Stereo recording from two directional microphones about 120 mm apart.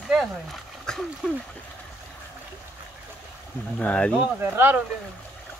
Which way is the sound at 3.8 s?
10° left (ahead or behind).